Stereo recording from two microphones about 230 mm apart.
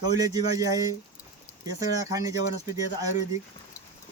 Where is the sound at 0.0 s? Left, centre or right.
Centre.